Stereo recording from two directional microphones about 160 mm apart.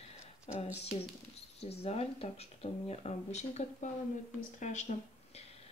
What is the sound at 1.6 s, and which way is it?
A woman's voice, 40° left (ahead or behind).